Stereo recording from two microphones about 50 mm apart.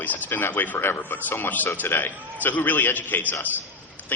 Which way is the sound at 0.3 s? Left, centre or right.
Left.